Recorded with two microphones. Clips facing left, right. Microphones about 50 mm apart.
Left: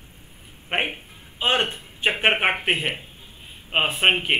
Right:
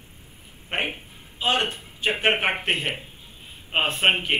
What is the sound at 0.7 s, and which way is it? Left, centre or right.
Speech, left.